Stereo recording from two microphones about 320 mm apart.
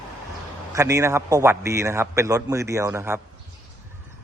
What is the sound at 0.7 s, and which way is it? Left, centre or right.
A man's voice, centre.